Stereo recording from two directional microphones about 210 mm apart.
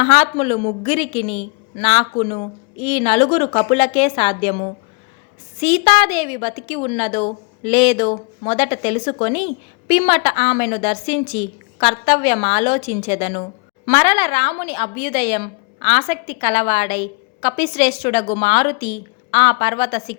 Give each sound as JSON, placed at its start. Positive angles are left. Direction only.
{"t": 0.0, "sound": "a woman's voice", "side_deg": 30}
{"t": 18.0, "sound": "a woman's voice", "side_deg": 25}